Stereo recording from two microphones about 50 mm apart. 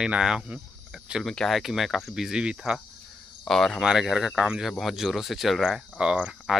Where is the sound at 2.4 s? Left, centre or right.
Centre.